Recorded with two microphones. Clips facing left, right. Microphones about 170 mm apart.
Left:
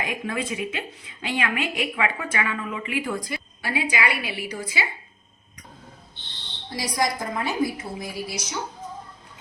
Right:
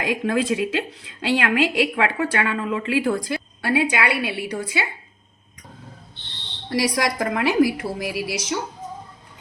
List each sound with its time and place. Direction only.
0.0 s a woman's voice: 85° right; by 4.9 s 60° right (ahead or behind)
6.7 s a woman's voice: 75° right (ahead or behind)
7.8 s a woman's voice: 90° right